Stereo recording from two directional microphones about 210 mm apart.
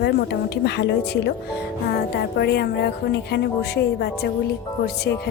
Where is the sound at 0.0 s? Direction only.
50° left (ahead or behind).